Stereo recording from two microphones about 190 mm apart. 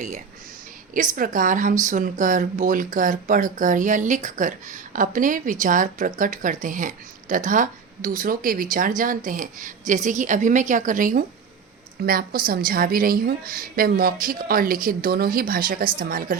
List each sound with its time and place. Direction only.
0.9 s speech: 45° right (ahead or behind)